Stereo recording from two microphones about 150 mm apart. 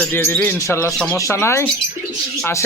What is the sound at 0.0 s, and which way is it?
Speech, 15° left (ahead or behind).